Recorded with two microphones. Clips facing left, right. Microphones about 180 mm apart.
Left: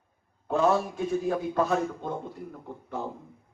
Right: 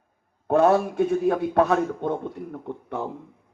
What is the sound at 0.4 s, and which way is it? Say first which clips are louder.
A man's voice: right 6 dB; 60° right (ahead or behind).